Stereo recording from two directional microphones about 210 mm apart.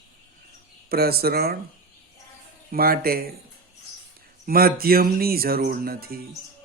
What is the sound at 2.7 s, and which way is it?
Speech, 45° right (ahead or behind).